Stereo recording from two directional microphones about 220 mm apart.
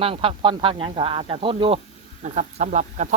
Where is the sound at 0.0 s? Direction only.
25° right (ahead or behind).